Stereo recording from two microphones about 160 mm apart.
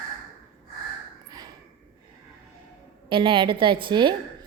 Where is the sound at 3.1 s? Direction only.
30° right (ahead or behind).